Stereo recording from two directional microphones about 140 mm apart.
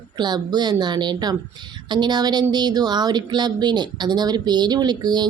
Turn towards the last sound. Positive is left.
turn(degrees=-30)  # may be behind; listen again after turning